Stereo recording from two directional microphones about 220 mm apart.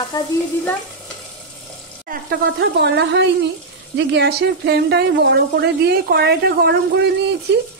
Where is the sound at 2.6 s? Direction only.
50° right (ahead or behind).